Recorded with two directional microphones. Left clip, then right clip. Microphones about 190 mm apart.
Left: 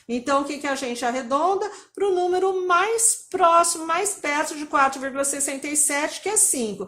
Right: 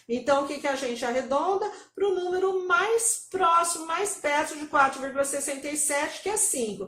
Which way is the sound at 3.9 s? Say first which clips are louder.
Left 3 dB; 45° left (ahead or behind).